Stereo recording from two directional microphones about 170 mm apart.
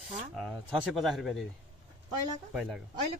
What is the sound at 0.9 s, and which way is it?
Speech, centre (ahead or behind).